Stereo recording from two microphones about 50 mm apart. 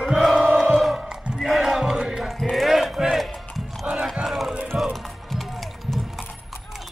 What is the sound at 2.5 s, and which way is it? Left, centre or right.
Clip-clop, centre.